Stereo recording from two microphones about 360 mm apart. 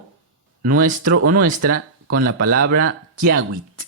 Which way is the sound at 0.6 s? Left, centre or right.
Right.